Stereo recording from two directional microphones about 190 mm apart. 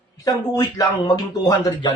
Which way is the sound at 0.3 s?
20° left (ahead or behind).